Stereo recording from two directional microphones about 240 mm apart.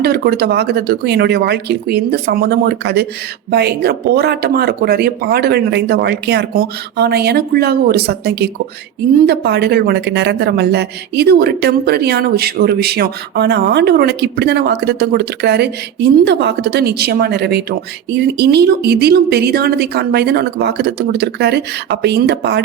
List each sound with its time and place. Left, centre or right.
0.0 s a woman's voice: right